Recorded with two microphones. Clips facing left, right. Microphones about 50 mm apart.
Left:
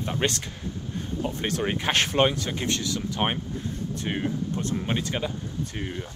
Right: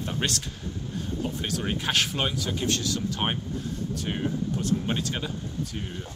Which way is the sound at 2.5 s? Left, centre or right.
Centre.